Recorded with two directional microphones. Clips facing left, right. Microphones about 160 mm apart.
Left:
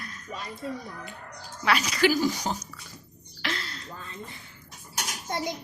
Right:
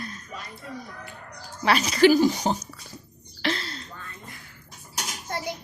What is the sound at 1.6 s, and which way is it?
Speech, 30° right (ahead or behind).